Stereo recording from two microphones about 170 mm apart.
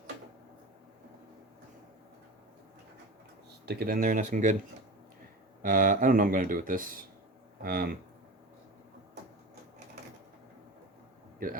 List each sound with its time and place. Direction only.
3.7 s speech: 60° right (ahead or behind)
5.6 s speech: 50° right (ahead or behind)